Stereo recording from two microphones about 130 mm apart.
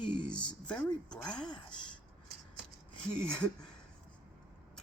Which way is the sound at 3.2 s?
5° left (ahead or behind).